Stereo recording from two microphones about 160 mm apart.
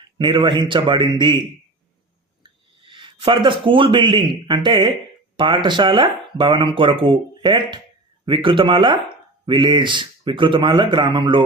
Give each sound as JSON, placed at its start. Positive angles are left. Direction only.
{"t": 0.2, "sound": "speech", "side_deg": -30}